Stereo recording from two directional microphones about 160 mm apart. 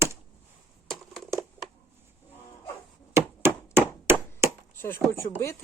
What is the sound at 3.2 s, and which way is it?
Chop, 15° right (ahead or behind).